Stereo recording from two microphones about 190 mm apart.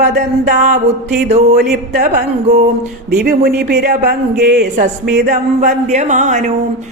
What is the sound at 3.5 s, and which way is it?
A man's voice, 55° right (ahead or behind).